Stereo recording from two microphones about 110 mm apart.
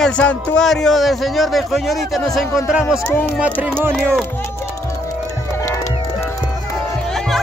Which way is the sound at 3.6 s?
20° right (ahead or behind).